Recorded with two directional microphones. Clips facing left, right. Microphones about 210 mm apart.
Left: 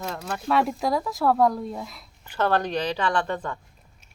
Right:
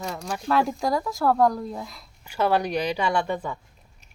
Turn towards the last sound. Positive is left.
turn(degrees=-10)  # may be behind; listen again after turning